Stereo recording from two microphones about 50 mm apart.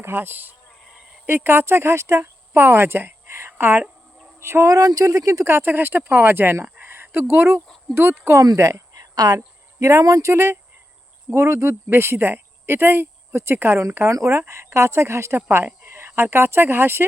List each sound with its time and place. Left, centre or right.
0.0 s a woman's voice: right
3.6 s speech: right
4.4 s speech: right
5.2 s speech: right
5.5 s speech: right
6.7 s a sound: right
7.9 s speech: right
8.4 s speech: right
9.8 s speech: right
11.9 s speech: right
13.3 s speech: right
14.1 s speech: right
15.4 s speech: right